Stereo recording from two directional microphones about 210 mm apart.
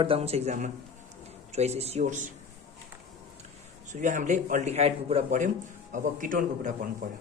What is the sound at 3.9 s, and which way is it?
Speech, 35° right (ahead or behind).